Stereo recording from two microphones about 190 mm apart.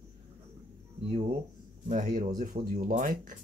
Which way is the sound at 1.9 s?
45° right (ahead or behind).